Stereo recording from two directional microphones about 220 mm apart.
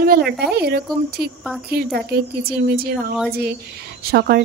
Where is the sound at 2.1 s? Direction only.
45° right (ahead or behind).